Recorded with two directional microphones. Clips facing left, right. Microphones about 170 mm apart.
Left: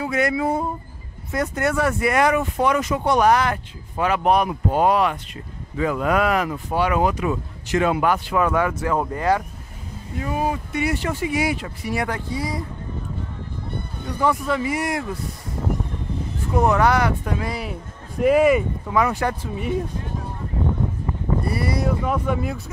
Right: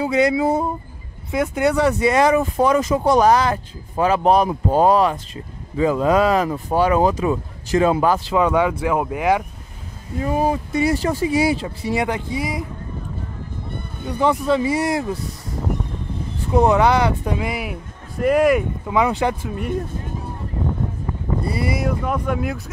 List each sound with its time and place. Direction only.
0.0 s speech: 20° right (ahead or behind)
1.3 s speech: 10° right (ahead or behind)
10.2 s speech: 35° right (ahead or behind); by 12.6 s 15° right (ahead or behind)
14.0 s speech: 25° right (ahead or behind)
16.5 s speech: 20° right (ahead or behind)
18.2 s speech: centre (ahead or behind)
18.9 s speech: 15° right (ahead or behind)
19.4 s speech: centre (ahead or behind)
21.8 s speech: centre (ahead or behind)